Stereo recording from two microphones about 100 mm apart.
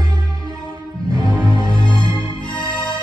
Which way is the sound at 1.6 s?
55° left (ahead or behind).